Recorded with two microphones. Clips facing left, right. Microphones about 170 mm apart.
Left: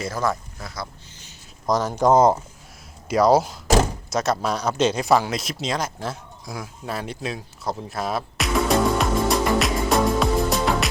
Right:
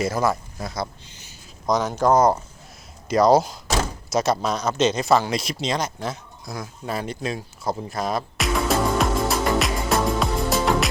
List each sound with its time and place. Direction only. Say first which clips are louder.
0.0 s speech: right 3 dB; 10° right (ahead or behind)
0.6 s speech: right 5 dB; 20° right (ahead or behind)
1.3 s a sound: even; centre (ahead or behind)
2.0 s speech: left 2 dB; 20° left (ahead or behind)
3.1 s speech: right 1 dB; 5° left (ahead or behind)
5.3 s a sound: right 1 dB; centre (ahead or behind)